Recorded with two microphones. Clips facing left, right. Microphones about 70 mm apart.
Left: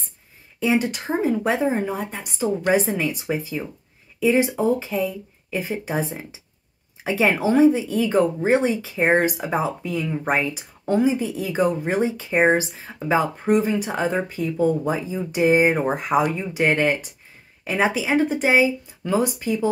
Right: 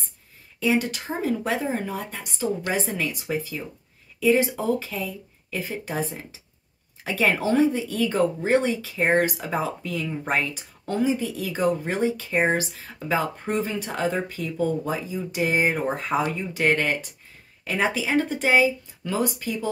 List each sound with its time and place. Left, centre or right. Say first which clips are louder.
0.6 s speech: left 2 dB; left